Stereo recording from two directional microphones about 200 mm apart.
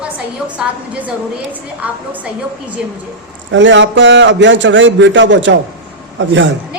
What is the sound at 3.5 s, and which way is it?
A man's voice, 65° right (ahead or behind).